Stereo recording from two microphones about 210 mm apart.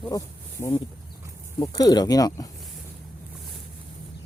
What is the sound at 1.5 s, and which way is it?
Speech, 20° left (ahead or behind).